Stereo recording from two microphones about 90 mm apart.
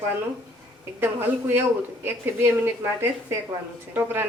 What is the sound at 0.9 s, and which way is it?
A woman's voice, 25° right (ahead or behind).